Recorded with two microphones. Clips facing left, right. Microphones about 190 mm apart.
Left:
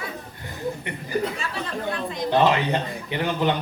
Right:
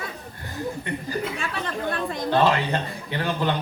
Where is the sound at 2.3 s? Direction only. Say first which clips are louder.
Left 1 dB; 15° left (ahead or behind).